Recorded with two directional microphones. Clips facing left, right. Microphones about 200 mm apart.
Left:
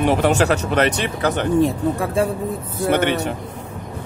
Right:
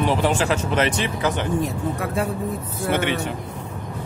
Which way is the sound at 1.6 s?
30° left (ahead or behind).